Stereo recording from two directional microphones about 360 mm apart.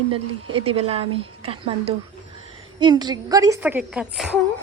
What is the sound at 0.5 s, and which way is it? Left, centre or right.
A woman's voice, centre.